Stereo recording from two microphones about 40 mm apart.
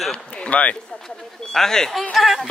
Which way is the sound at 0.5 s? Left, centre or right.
Left.